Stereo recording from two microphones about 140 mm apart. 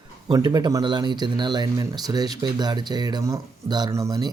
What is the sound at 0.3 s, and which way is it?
Speech, 30° right (ahead or behind).